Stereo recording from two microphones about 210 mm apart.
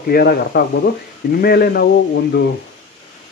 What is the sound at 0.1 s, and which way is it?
Speech, 45° left (ahead or behind).